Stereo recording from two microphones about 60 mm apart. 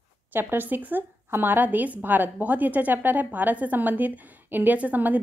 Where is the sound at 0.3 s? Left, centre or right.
Right.